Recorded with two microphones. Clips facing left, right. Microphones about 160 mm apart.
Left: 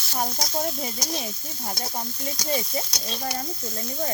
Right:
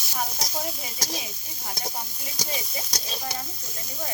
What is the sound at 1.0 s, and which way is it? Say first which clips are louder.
Speech: even; 5° right (ahead or behind).